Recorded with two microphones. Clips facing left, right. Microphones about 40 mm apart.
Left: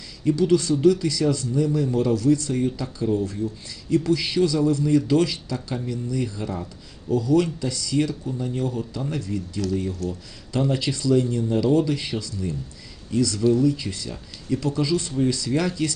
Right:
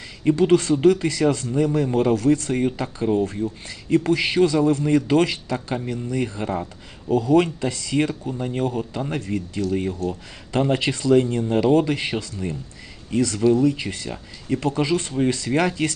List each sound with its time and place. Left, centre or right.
0.3 s speech: right